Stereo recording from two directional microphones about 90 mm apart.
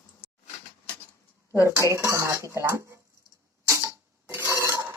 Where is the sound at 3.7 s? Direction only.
30° right (ahead or behind).